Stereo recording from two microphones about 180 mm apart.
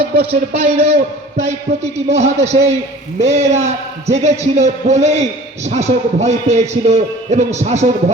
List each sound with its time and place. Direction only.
0.0 s a man's voice: 30° right (ahead or behind)